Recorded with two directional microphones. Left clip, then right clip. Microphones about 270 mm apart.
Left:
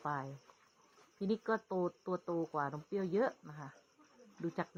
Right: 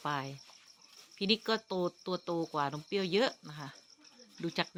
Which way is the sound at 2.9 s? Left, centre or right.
Right.